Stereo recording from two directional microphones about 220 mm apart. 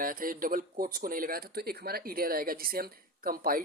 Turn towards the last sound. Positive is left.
turn(degrees=-40)  # may be behind; listen again after turning